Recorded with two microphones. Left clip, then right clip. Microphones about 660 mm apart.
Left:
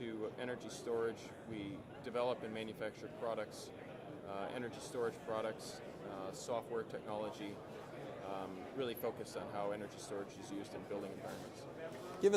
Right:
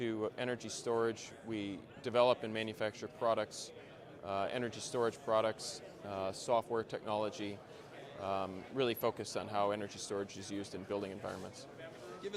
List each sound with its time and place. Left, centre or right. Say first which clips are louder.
0.0 s a man's voice: right 6 dB; right